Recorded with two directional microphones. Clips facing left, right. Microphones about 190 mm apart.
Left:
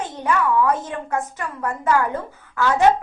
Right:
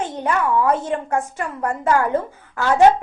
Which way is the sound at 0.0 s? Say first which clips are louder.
Right 1 dB; 30° right (ahead or behind).